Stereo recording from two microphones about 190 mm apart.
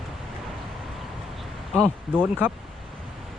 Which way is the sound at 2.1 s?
5° right (ahead or behind).